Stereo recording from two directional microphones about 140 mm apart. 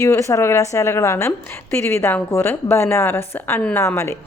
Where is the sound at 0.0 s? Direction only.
20° left (ahead or behind).